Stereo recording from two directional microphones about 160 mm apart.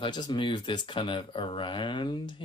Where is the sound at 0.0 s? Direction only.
25° left (ahead or behind).